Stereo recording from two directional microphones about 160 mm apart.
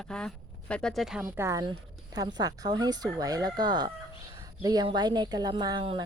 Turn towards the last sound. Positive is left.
turn(degrees=-30)  # may be behind; listen again after turning